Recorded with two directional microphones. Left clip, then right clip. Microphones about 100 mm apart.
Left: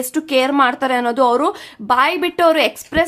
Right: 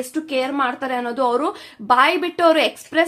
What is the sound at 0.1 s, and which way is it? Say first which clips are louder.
A woman's voice: left 8 dB; 45° left (ahead or behind).